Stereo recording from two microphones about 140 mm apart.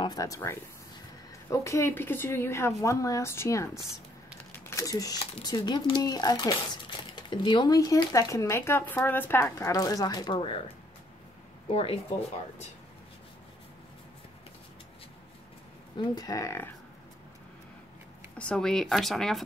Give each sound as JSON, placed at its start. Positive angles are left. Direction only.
{"t": 0.0, "sound": "a woman's voice", "side_deg": 25}
{"t": 11.7, "sound": "speech", "side_deg": 40}
{"t": 16.0, "sound": "speech", "side_deg": 25}
{"t": 18.4, "sound": "speech", "side_deg": 5}